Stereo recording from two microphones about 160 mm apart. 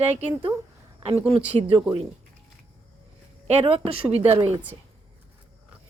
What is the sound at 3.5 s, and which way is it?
Speech, 40° right (ahead or behind).